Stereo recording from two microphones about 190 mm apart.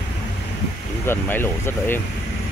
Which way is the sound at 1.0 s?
10° left (ahead or behind).